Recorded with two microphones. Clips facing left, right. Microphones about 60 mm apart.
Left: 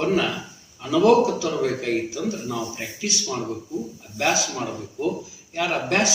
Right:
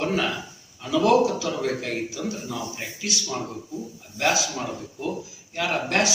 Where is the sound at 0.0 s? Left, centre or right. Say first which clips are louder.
Left 3 dB; centre.